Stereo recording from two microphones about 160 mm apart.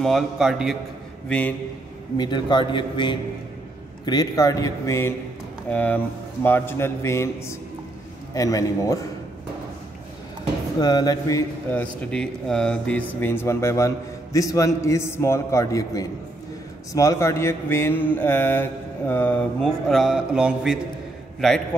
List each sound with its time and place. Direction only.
0.0 s speech: centre (ahead or behind)
2.1 s a man's voice: 30° left (ahead or behind)
5.7 s mantra: 10° left (ahead or behind)
8.4 s a man's voice: 20° left (ahead or behind)
10.8 s a man's voice: 25° left (ahead or behind)
11.8 s a man's voice: 5° left (ahead or behind); by 16.1 s 20° left (ahead or behind)
16.9 s mantra: 20° left (ahead or behind); by 20.8 s 5° right (ahead or behind)